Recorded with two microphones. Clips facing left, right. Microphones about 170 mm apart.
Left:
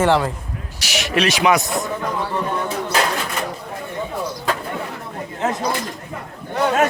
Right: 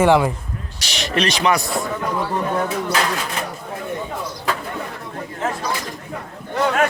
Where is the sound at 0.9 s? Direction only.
5° left (ahead or behind).